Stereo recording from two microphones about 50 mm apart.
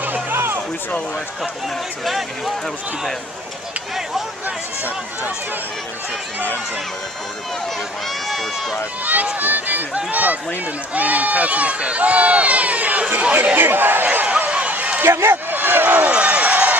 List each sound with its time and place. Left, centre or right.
0.3 s a sound: right
2.0 s speech: centre
8.3 s speech: centre
9.0 s speech: right
13.6 s speech: right
14.0 s a sound: right
15.0 s speech: right
15.5 s a sound: right
16.1 s run: right